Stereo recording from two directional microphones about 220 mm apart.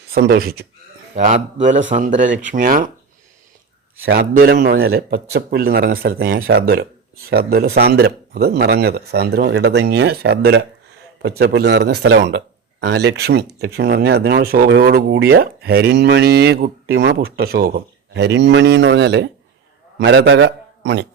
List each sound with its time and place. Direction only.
0.1 s speech: 45° right (ahead or behind)
1.1 s speech: 30° right (ahead or behind)
4.0 s a man's voice: 45° right (ahead or behind)